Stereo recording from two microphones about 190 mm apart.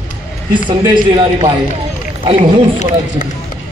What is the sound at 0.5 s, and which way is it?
Speech, 25° right (ahead or behind).